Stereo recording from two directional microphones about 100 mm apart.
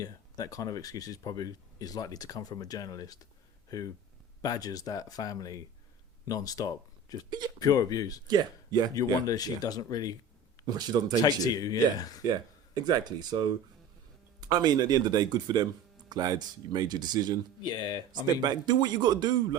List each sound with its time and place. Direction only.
0.0 s speech: 35° left (ahead or behind)
4.4 s speech: 40° left (ahead or behind)
8.3 s speech: 45° right (ahead or behind)
9.2 s speech: 40° left (ahead or behind)
10.7 s speech: 40° right (ahead or behind)
11.2 s speech: 40° left (ahead or behind)
12.3 s speech: 45° right (ahead or behind)
14.4 s speech: 45° right (ahead or behind)
17.7 s speech: 45° left (ahead or behind)
18.4 s speech: 45° right (ahead or behind)